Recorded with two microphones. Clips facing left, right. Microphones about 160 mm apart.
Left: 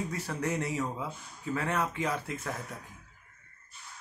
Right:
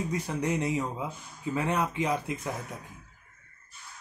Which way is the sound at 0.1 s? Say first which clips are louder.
Right 3 dB; 15° right (ahead or behind).